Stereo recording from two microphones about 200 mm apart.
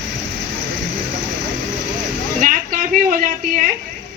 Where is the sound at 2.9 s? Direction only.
45° right (ahead or behind).